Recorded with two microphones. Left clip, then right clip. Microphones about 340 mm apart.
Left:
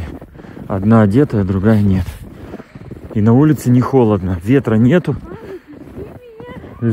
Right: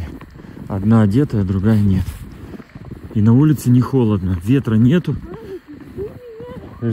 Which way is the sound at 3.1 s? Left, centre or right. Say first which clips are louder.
Left 3 dB; centre.